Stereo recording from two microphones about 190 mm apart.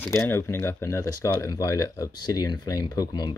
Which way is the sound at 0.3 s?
15° left (ahead or behind).